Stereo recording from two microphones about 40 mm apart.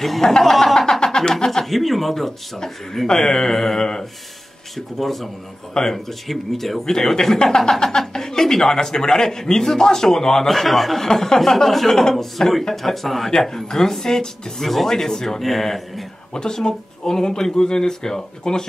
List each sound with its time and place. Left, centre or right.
0.4 s a man's voice: centre
16.3 s a man's voice: centre